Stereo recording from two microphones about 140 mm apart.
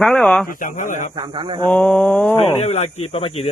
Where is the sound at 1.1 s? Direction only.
30° right (ahead or behind).